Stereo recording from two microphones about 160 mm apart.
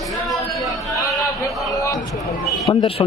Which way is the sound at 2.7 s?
25° left (ahead or behind).